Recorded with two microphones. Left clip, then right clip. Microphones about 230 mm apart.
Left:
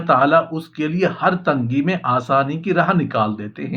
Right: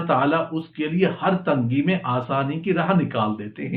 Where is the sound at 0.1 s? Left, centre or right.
Left.